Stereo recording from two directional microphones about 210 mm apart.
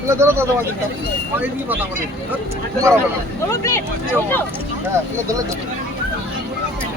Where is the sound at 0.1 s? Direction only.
10° right (ahead or behind).